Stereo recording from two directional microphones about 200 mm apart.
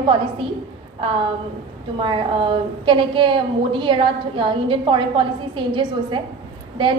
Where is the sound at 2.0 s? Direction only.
25° right (ahead or behind).